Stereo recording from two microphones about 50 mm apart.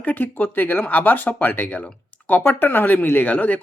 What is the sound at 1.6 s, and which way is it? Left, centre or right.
Speech, left.